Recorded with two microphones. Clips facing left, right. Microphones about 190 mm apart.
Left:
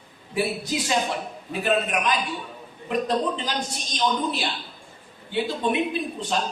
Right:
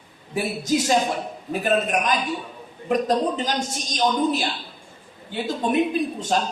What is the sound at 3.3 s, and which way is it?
A man's voice, 45° right (ahead or behind).